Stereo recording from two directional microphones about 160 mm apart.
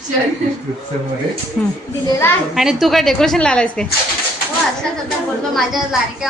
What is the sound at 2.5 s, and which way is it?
A woman's voice, centre (ahead or behind).